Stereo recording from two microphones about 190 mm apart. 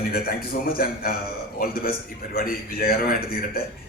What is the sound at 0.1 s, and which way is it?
A man's voice, 50° left (ahead or behind).